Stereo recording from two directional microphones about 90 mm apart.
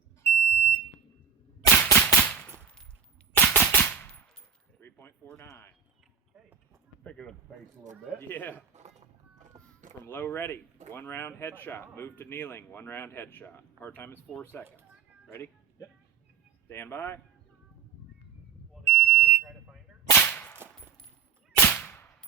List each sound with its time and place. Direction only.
0.2 s smoke detector: 20° left (ahead or behind)
1.7 s a sound: 25° left (ahead or behind)
2.1 s gunshot: 20° left (ahead or behind)
2.6 s machine gun: 15° left (ahead or behind)
3.3 s cap gun: 20° left (ahead or behind)
4.8 s coin: 25° left (ahead or behind)
5.4 s speech: 25° left (ahead or behind)
7.0 s speech: 10° left (ahead or behind)
8.3 s speech: 20° left (ahead or behind)
10.0 s speech: 25° left (ahead or behind)
15.3 s music: 30° left (ahead or behind)
16.6 s speech: 25° left (ahead or behind)
18.7 s smoke detector: 10° right (ahead or behind)
20.1 s whip: 20° left (ahead or behind)